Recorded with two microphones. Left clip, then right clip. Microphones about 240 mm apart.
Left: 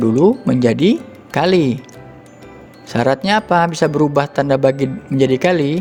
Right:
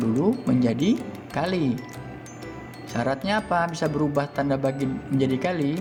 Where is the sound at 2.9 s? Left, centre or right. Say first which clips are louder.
Left 10 dB; left.